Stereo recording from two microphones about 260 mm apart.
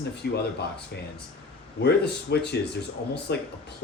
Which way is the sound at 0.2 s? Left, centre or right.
Left.